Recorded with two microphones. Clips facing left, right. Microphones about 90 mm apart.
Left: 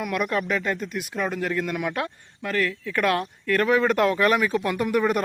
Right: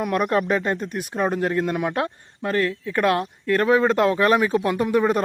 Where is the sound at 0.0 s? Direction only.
35° right (ahead or behind).